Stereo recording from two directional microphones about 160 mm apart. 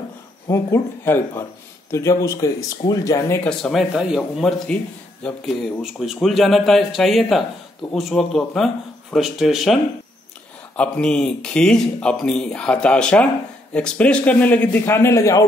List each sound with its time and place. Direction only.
0.5 s a man's voice: 20° left (ahead or behind)
3.4 s speech: centre (ahead or behind)
10.8 s a man's voice: 5° left (ahead or behind)